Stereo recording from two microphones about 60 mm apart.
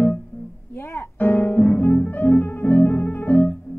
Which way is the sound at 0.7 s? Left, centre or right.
Left.